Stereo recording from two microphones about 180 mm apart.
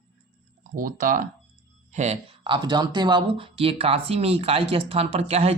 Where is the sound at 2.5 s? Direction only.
25° right (ahead or behind).